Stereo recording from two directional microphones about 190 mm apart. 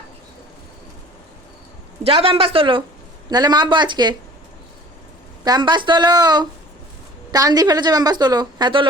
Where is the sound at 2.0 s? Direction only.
30° right (ahead or behind).